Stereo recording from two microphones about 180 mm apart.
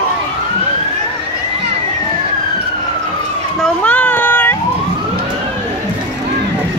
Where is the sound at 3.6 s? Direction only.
10° left (ahead or behind).